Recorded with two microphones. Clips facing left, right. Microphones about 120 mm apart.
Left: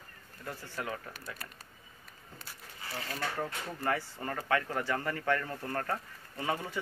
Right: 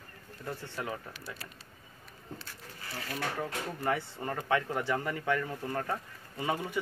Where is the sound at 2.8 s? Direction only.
25° left (ahead or behind).